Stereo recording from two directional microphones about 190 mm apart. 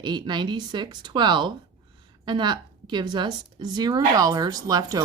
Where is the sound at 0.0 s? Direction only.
25° right (ahead or behind).